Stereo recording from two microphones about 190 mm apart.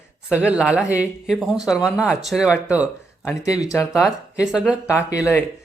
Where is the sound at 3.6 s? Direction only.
15° left (ahead or behind).